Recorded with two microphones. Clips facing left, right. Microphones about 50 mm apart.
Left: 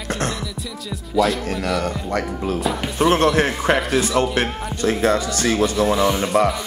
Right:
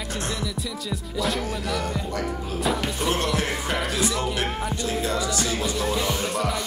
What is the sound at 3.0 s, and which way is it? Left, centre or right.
Music, left.